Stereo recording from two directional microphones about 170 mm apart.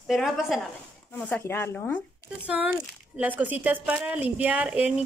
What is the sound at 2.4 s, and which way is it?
Speech, 5° right (ahead or behind).